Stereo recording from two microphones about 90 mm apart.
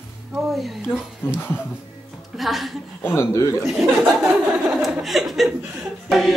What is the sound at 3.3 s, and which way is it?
Speech, 35° left (ahead or behind).